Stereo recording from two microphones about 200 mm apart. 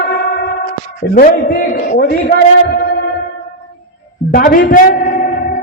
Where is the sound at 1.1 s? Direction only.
45° left (ahead or behind).